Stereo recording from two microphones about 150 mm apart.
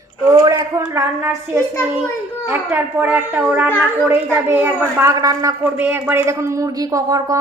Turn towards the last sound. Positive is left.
turn(degrees=-25)  # may be behind; listen again after turning